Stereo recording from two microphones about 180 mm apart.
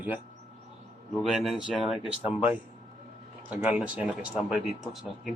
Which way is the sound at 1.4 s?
Centre (ahead or behind).